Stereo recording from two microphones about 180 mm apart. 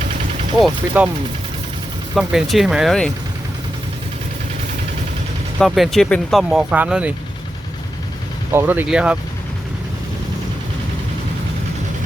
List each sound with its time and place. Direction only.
0.0 s a sound: 40° right (ahead or behind)
0.6 s speech: 5° right (ahead or behind)
2.1 s speech: centre (ahead or behind)
5.5 s speech: centre (ahead or behind)
8.5 s speech: 10° right (ahead or behind)